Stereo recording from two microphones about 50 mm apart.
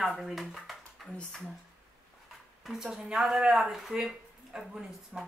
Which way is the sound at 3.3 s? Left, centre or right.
Centre.